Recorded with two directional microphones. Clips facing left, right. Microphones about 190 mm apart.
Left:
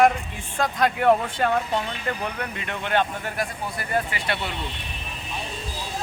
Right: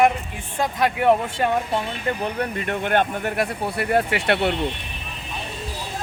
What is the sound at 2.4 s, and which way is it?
Speech, 45° right (ahead or behind).